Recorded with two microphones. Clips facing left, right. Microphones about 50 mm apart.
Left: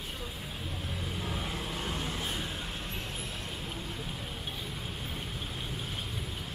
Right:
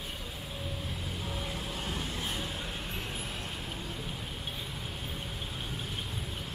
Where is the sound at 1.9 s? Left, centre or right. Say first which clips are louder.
Even; centre.